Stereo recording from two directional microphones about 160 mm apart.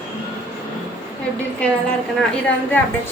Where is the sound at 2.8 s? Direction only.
10° left (ahead or behind).